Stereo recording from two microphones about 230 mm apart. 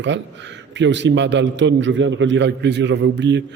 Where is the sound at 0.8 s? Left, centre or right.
Right.